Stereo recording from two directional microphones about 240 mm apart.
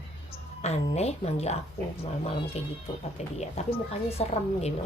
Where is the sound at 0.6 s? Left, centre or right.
Left.